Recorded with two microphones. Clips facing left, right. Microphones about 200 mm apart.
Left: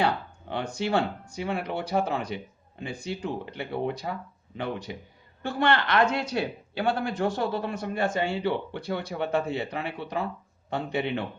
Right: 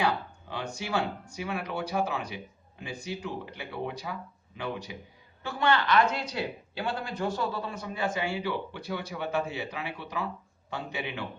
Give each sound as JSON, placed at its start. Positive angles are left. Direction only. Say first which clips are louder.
{"t": 0.5, "sound": "speech", "louder": "left 5 dB", "side_deg": 60}
{"t": 3.6, "sound": "speech", "louder": "left 7 dB", "side_deg": 55}